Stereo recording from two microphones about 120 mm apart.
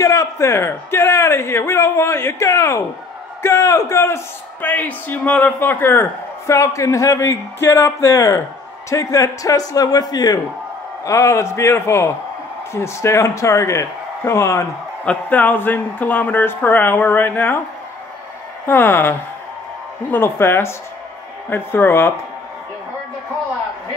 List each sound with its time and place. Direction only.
0.0 s a man's voice: 25° left (ahead or behind)
15.0 s speech: 15° left (ahead or behind)
18.7 s speech: 20° left (ahead or behind)